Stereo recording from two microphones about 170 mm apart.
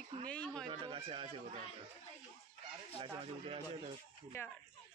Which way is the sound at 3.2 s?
35° right (ahead or behind).